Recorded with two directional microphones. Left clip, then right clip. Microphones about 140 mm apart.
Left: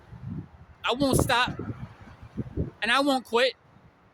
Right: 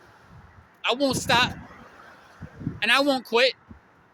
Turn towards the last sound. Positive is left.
turn(degrees=15)  # may be behind; listen again after turning